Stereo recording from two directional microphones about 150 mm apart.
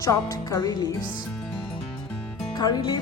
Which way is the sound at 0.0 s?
20° left (ahead or behind).